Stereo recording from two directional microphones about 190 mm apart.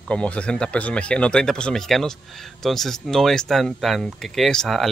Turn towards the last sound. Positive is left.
turn(degrees=0)  # may be behind; listen again after turning